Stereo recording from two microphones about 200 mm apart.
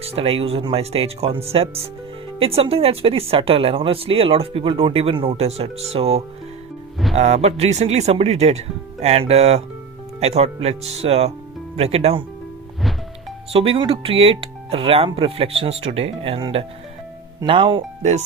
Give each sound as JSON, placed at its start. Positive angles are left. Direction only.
{"t": 0.0, "sound": "speech", "side_deg": -30}
{"t": 13.5, "sound": "speech", "side_deg": -30}